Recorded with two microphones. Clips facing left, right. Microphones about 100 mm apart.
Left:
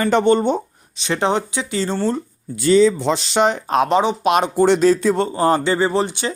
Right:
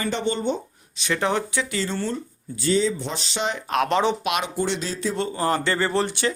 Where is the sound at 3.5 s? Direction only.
30° left (ahead or behind).